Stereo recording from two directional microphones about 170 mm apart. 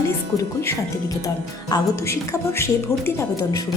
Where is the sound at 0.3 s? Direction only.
15° left (ahead or behind).